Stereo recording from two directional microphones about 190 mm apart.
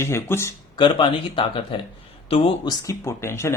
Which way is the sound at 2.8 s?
15° left (ahead or behind).